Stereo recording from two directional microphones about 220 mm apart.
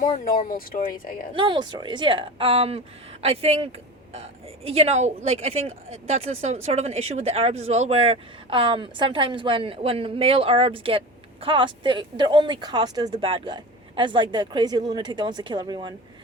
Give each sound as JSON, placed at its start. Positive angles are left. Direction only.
{"t": 0.3, "sound": "speech", "side_deg": 40}
{"t": 1.4, "sound": "a woman's voice", "side_deg": -20}